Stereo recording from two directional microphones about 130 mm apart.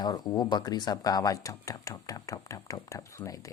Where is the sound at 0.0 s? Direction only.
30° left (ahead or behind).